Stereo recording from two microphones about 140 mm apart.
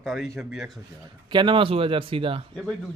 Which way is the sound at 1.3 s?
35° right (ahead or behind).